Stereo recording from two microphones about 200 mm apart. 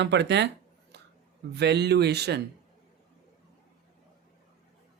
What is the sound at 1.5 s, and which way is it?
Speech, 55° right (ahead or behind).